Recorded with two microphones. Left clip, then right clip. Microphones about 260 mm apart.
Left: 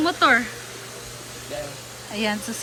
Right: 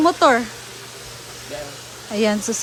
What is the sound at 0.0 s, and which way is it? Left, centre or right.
Speech, centre.